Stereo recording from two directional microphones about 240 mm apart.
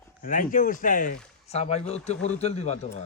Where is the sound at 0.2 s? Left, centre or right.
Left.